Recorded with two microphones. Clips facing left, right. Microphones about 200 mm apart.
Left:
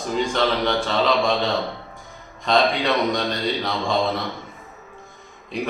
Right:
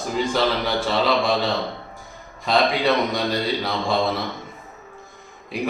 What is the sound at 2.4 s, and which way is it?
Speech, 5° right (ahead or behind).